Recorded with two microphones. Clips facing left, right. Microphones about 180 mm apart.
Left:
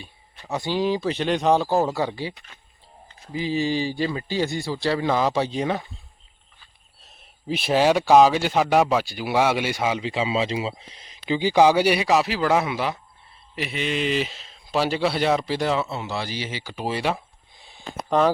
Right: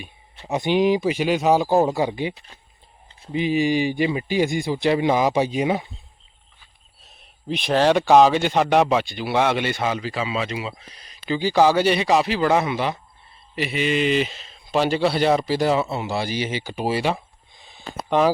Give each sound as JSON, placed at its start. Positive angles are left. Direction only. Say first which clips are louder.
{"t": 0.0, "sound": "speech", "louder": "right 3 dB", "side_deg": -20}
{"t": 7.0, "sound": "speech", "louder": "even", "side_deg": 5}
{"t": 10.0, "sound": "speech", "louder": "left 2 dB", "side_deg": 25}
{"t": 17.6, "sound": "a sound", "louder": "right 1 dB", "side_deg": 10}